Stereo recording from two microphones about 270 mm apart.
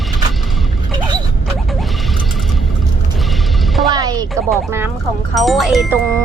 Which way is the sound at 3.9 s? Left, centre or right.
Centre.